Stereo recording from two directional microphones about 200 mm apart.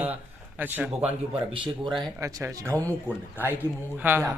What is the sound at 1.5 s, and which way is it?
A man's voice, 25° right (ahead or behind).